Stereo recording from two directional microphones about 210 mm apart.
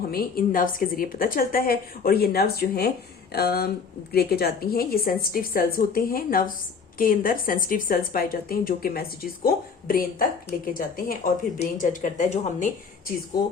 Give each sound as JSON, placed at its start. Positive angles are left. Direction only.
{"t": 0.1, "sound": "a woman's voice", "side_deg": 45}